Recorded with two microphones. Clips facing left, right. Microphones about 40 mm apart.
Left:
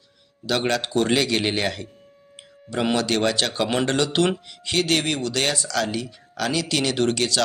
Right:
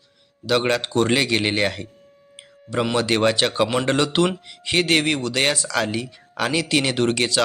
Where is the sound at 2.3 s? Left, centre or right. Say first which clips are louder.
Right 3 dB; centre.